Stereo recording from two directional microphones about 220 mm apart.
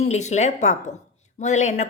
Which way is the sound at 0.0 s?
30° left (ahead or behind).